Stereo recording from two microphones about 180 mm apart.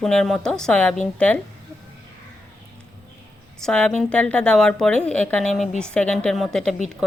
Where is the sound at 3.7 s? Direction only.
5° left (ahead or behind).